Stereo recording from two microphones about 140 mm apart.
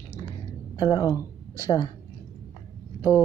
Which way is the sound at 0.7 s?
30° left (ahead or behind).